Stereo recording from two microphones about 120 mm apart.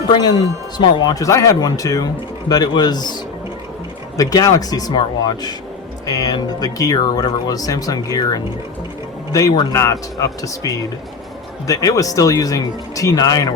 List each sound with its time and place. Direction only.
0.1 s speech: 35° left (ahead or behind)
4.2 s speech: 30° left (ahead or behind)
9.7 s speech: 25° left (ahead or behind)